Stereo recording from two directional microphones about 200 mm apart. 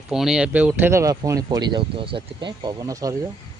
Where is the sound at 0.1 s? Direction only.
Centre (ahead or behind).